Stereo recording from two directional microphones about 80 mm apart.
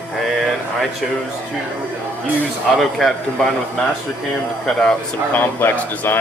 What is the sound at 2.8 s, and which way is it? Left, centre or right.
Speech, centre.